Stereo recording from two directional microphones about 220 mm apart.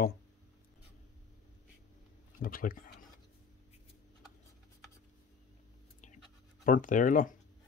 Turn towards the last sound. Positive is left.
turn(degrees=35)  # may be behind; listen again after turning